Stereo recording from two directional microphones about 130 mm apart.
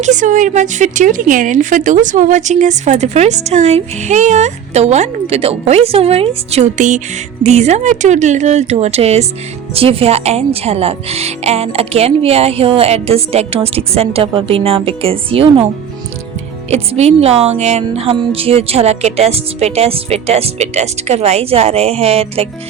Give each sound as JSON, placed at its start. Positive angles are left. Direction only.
{"t": 0.0, "sound": "speech", "side_deg": -70}
{"t": 7.4, "sound": "speech", "side_deg": -60}
{"t": 16.6, "sound": "speech", "side_deg": -55}